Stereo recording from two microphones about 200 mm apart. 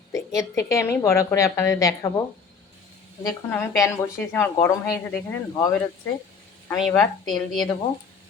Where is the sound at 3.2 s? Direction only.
15° left (ahead or behind).